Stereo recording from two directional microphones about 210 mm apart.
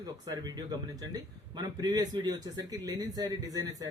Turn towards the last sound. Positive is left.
turn(degrees=-15)  # may be behind; listen again after turning